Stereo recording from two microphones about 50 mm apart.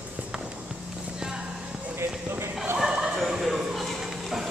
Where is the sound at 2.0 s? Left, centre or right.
Right.